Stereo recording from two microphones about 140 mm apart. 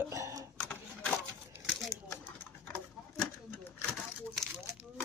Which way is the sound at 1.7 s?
Centre (ahead or behind).